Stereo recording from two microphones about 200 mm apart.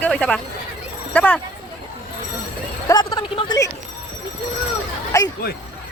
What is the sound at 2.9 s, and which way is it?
Speech, 20° left (ahead or behind).